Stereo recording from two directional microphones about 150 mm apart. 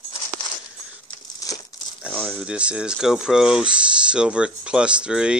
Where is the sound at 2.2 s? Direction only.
10° right (ahead or behind).